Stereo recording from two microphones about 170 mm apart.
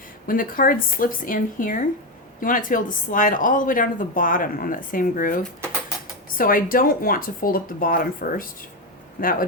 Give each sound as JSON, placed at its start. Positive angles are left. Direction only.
{"t": 0.3, "sound": "speech", "side_deg": 55}